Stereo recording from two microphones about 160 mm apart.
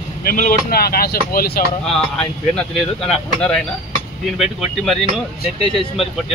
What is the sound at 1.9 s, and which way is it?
Speech, 5° left (ahead or behind).